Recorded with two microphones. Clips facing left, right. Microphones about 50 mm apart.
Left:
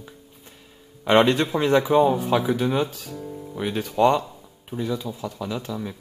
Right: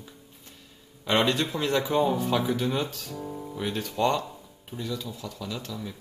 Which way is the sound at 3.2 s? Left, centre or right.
Centre.